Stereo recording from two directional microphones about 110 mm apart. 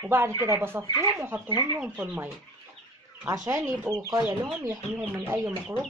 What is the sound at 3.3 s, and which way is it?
Speech, 30° right (ahead or behind).